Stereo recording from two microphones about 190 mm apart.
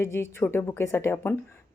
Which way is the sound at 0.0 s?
15° left (ahead or behind).